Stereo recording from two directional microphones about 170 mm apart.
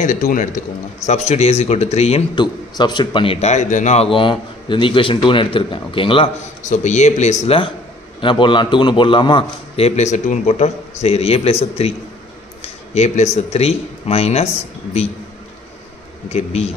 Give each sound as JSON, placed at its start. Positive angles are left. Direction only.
{"t": 0.0, "sound": "a man's voice", "side_deg": 50}
{"t": 2.3, "sound": "a man's voice", "side_deg": 25}
{"t": 6.6, "sound": "a man's voice", "side_deg": 45}
{"t": 12.6, "sound": "speech", "side_deg": 40}
{"t": 16.3, "sound": "a man's voice", "side_deg": 40}